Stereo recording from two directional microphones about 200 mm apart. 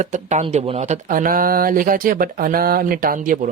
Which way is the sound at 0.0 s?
35° right (ahead or behind).